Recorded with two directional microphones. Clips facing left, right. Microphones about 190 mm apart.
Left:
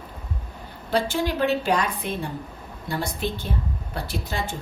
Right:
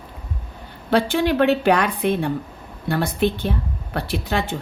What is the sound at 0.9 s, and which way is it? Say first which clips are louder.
A woman's voice: right 5 dB; 65° right (ahead or behind).